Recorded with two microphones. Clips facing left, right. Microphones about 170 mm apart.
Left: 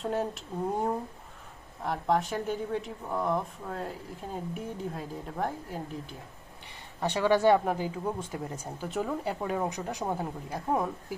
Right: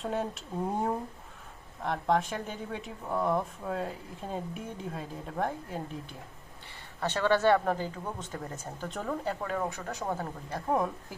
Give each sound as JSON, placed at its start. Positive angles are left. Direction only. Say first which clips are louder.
{"t": 0.0, "sound": "speech", "louder": "left 2 dB", "side_deg": 0}
{"t": 7.0, "sound": "speech", "louder": "left 2 dB", "side_deg": 15}